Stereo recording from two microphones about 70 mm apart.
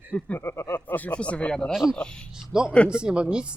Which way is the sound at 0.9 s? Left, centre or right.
Left.